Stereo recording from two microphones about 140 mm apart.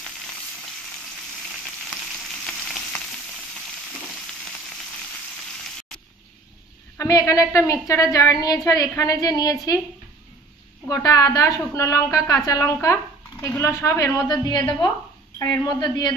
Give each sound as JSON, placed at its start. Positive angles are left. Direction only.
{"t": 2.4, "sound": "frying", "side_deg": 5}
{"t": 7.0, "sound": "a woman's voice", "side_deg": 25}
{"t": 10.9, "sound": "a woman's voice", "side_deg": 25}